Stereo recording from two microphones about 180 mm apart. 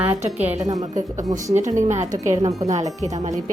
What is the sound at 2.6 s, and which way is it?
Speech, 20° right (ahead or behind).